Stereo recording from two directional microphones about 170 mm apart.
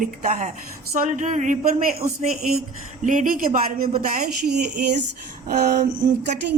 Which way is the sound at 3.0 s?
50° right (ahead or behind).